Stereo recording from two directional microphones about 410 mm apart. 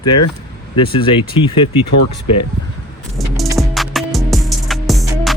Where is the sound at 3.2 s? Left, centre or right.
Centre.